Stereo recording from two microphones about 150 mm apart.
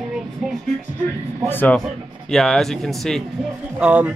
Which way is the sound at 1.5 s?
10° left (ahead or behind).